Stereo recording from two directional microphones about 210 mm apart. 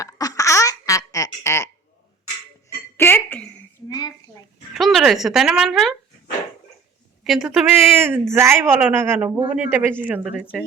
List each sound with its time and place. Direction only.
0.0 s baby laughter: 15° left (ahead or behind)
3.0 s a sound: 10° left (ahead or behind)
4.7 s speech: centre (ahead or behind)
7.3 s a woman's voice: centre (ahead or behind)